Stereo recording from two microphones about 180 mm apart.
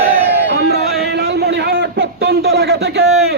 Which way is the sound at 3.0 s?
5° right (ahead or behind).